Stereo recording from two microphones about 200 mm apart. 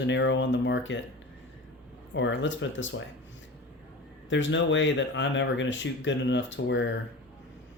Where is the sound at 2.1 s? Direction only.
65° left (ahead or behind).